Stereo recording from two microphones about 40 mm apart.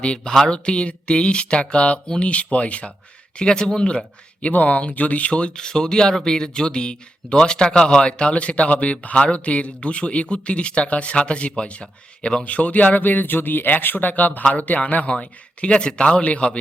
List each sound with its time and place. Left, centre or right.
0.0 s speech: left
3.3 s speech: left
4.5 s speech: left
12.5 s speech: left
13.0 s speech: left